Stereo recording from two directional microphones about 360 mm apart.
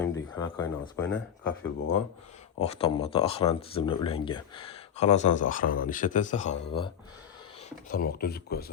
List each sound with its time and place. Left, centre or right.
0.0 s a sound: centre
1.0 s speech: left
2.6 s speech: centre